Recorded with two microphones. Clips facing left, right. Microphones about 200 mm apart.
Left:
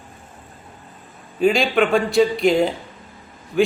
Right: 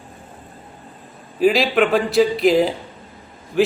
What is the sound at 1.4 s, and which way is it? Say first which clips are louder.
A man's voice: right 1 dB; 5° right (ahead or behind).